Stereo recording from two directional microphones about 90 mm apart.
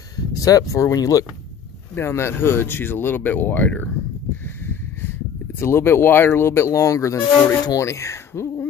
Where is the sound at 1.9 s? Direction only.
30° left (ahead or behind).